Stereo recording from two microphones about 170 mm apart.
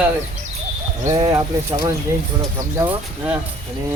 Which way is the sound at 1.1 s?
25° right (ahead or behind).